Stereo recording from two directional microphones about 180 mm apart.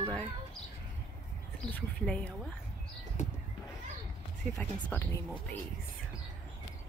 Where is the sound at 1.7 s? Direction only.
5° left (ahead or behind).